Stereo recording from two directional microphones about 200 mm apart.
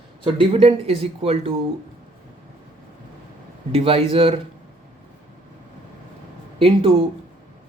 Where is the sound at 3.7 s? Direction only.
30° right (ahead or behind).